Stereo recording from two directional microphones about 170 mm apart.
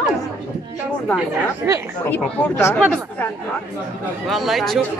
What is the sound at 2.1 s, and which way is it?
Speech, 15° left (ahead or behind).